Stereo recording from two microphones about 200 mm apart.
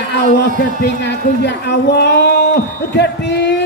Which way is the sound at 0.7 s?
55° left (ahead or behind).